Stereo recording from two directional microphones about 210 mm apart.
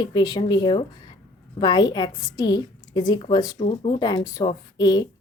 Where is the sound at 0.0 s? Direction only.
20° left (ahead or behind).